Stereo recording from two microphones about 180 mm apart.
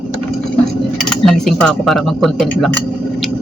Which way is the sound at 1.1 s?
5° left (ahead or behind).